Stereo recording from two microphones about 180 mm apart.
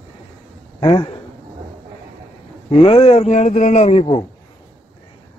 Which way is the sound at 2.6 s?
30° left (ahead or behind).